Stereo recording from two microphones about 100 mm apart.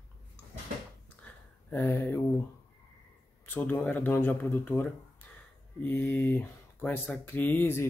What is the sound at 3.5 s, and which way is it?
Speech, 20° left (ahead or behind).